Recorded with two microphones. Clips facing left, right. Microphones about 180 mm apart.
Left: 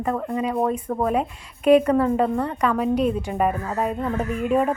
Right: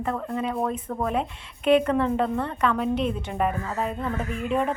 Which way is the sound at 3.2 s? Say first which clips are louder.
Left 3 dB; 5° left (ahead or behind).